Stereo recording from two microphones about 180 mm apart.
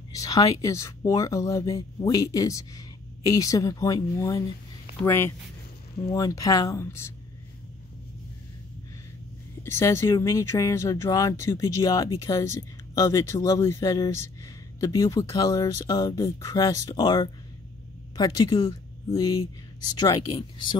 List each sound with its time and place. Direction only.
0.1 s speech: 20° left (ahead or behind)
9.6 s speech: 15° left (ahead or behind)